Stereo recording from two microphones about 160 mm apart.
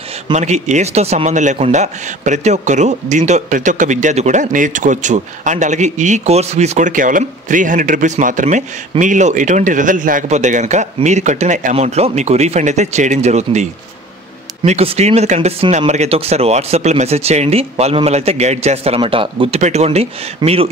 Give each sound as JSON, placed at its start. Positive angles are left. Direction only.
{"t": 0.3, "sound": "speech", "side_deg": -45}